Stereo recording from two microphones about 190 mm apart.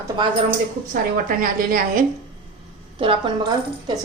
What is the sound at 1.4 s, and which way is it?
Speech, 45° right (ahead or behind).